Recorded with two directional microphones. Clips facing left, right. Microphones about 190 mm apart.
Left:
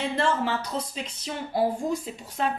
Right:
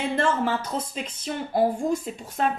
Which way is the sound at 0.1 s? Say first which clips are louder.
Right 4 dB; 50° right (ahead or behind).